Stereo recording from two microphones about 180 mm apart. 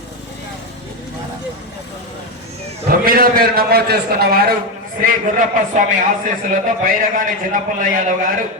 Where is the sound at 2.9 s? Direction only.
55° right (ahead or behind).